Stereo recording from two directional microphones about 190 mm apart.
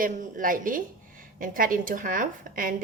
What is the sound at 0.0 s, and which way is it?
A woman's voice, 45° right (ahead or behind).